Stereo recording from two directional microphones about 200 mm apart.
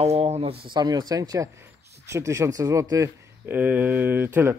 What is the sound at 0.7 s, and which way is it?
Speech, 20° right (ahead or behind).